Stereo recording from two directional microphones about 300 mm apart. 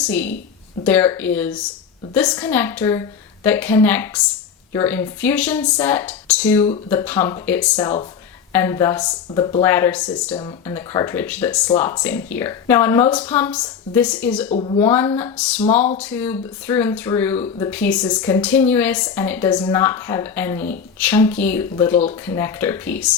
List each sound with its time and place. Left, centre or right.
0.0 s a woman's voice: centre
14.5 s speech: centre
14.8 s a woman's voice: centre